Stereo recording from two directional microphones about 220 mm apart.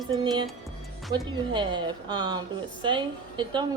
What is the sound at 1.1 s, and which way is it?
A woman's voice, 20° right (ahead or behind).